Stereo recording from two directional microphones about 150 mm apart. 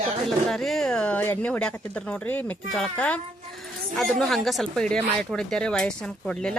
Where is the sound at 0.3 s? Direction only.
Centre (ahead or behind).